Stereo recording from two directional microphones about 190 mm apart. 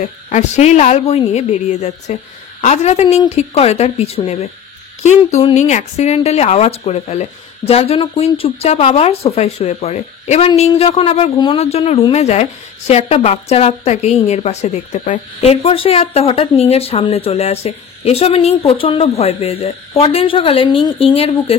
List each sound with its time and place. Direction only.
0.3 s a woman's voice: 35° left (ahead or behind)